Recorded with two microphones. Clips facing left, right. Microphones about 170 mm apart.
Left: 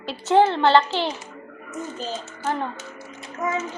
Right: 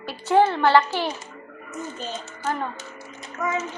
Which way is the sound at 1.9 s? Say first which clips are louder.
Left 2 dB; 35° left (ahead or behind).